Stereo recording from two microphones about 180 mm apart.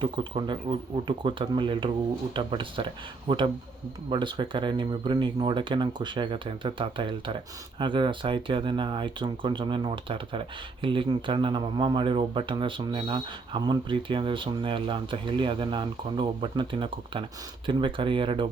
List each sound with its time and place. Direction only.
0.0 s speech: 25° right (ahead or behind)